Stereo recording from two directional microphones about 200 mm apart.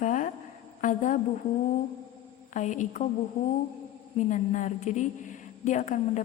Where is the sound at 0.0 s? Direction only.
40° left (ahead or behind).